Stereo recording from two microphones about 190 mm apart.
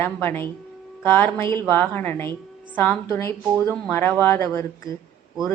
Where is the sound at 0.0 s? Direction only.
10° left (ahead or behind).